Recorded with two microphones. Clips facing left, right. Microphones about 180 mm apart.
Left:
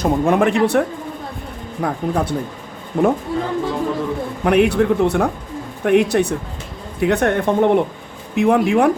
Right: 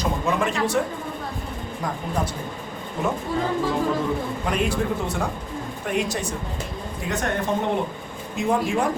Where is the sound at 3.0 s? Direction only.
55° left (ahead or behind).